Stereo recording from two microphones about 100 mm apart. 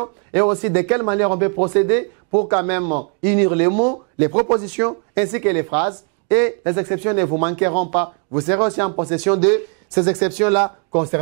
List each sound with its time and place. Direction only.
0.0 s speech: 20° right (ahead or behind)